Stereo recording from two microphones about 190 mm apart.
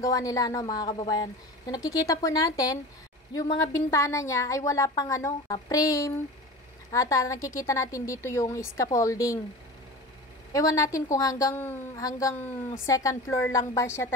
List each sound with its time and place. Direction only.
0.0 s a woman's voice: 20° left (ahead or behind)
10.5 s a woman's voice: 15° left (ahead or behind)